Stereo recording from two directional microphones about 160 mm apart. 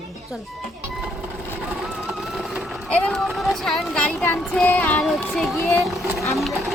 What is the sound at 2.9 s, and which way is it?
A woman's voice, 5° left (ahead or behind).